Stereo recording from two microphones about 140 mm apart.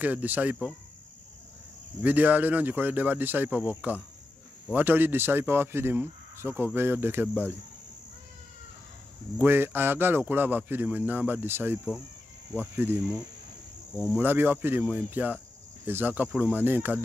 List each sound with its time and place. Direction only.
0.0 s speech: 10° right (ahead or behind)
2.0 s speech: 10° right (ahead or behind)
9.4 s speech: 15° right (ahead or behind)
14.1 s speech: 15° right (ahead or behind)